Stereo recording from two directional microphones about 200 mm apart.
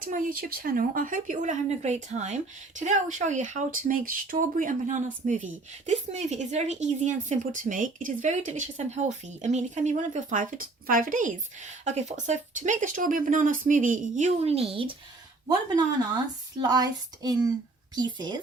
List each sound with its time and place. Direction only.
0.0 s a woman's voice: 45° right (ahead or behind); by 18.3 s 20° right (ahead or behind)